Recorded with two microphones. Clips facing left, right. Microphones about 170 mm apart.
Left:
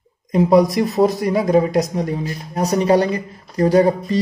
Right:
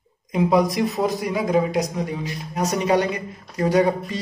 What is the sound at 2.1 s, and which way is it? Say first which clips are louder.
Speech: left 4 dB; 35° left (ahead or behind).